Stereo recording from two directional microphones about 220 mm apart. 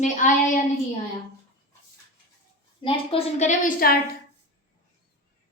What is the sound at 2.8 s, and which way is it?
A woman's voice, 30° left (ahead or behind).